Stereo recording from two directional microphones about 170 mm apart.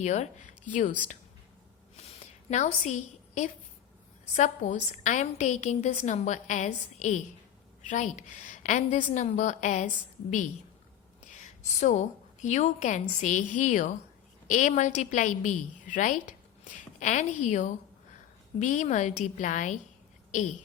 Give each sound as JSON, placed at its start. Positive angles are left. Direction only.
{"t": 0.0, "sound": "a woman's voice", "side_deg": 45}
{"t": 2.0, "sound": "a sound", "side_deg": 40}
{"t": 4.4, "sound": "a woman's voice", "side_deg": 45}
{"t": 11.3, "sound": "a woman's voice", "side_deg": 45}